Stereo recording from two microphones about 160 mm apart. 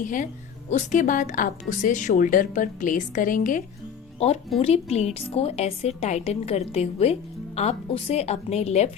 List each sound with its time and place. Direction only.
0.7 s speech: 50° left (ahead or behind)
4.2 s a woman's voice: 40° left (ahead or behind)